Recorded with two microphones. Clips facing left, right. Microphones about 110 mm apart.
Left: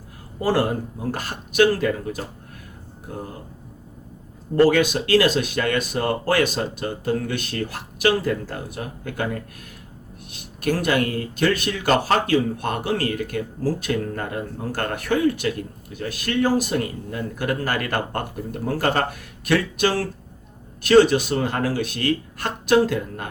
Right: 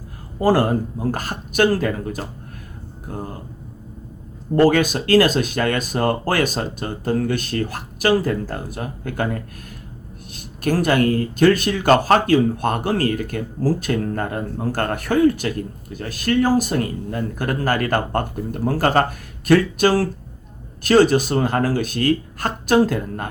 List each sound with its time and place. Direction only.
0.4 s speech: 45° right (ahead or behind)
4.6 s speech: 45° right (ahead or behind)
10.6 s speech: 40° right (ahead or behind)
19.5 s speech: 40° right (ahead or behind)